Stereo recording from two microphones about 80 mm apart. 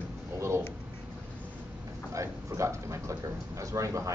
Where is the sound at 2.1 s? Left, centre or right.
Right.